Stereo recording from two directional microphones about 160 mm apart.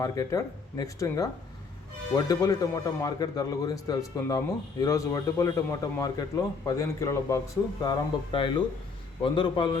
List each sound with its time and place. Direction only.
0.0 s speech: 20° left (ahead or behind)
7.9 s speech: 30° left (ahead or behind)